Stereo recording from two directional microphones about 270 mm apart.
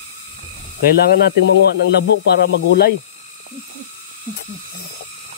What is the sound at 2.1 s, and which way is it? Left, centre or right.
Speech, left.